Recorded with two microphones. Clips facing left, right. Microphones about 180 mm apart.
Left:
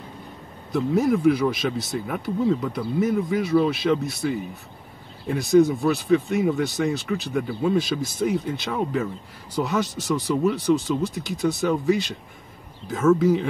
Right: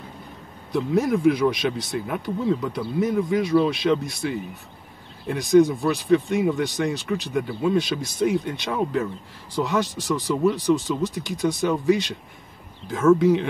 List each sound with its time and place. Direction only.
0.7 s speech: centre (ahead or behind)